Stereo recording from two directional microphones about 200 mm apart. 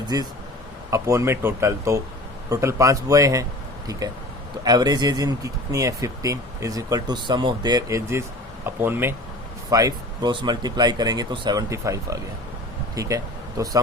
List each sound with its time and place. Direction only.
0.1 s speech: 20° right (ahead or behind)